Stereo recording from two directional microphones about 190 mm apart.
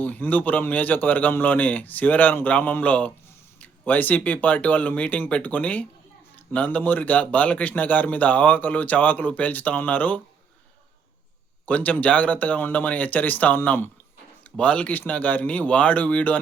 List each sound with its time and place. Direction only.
0.0 s a man's voice: 10° left (ahead or behind)
11.6 s a man's voice: 10° left (ahead or behind)